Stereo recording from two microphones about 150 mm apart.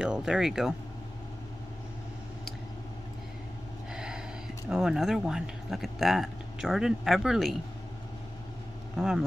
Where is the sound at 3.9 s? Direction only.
5° right (ahead or behind).